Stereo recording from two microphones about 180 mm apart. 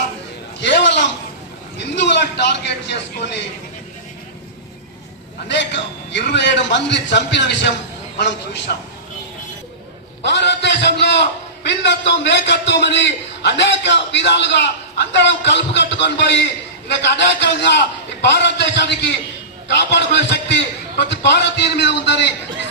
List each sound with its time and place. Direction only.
0.6 s a sound: 75° left (ahead or behind)
1.8 s a man's voice: 75° left (ahead or behind)
5.5 s a man's voice: 80° left
10.2 s a man's voice: 75° left (ahead or behind)